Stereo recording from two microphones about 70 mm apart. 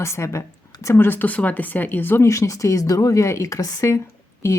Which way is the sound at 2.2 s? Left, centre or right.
Left.